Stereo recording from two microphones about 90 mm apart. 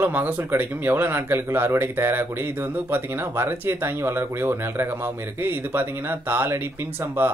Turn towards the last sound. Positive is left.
turn(degrees=-25)  # may be behind; listen again after turning